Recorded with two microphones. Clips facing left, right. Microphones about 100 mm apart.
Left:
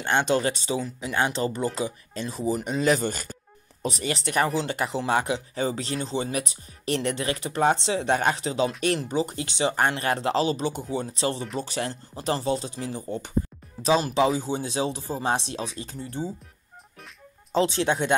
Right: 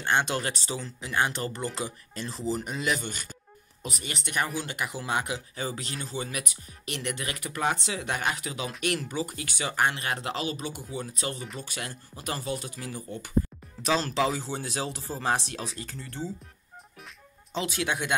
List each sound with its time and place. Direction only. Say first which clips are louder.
0.0 s speech: left 4 dB; 25° left (ahead or behind)
2.8 s speech: left 7 dB; 40° left (ahead or behind); by 16.3 s 15° left (ahead or behind)
17.5 s speech: left 7 dB; 30° left (ahead or behind)